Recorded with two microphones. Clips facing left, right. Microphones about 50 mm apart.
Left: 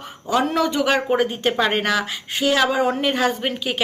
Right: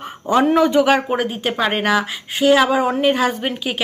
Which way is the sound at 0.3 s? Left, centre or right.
Right.